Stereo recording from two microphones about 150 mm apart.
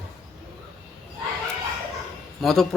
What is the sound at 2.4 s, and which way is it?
Speech, centre (ahead or behind).